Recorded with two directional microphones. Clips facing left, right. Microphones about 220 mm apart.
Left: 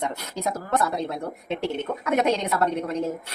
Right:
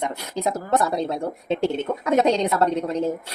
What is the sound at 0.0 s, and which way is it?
A woman's voice, 15° right (ahead or behind).